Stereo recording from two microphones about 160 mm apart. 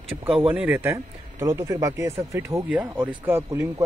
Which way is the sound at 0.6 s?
10° right (ahead or behind).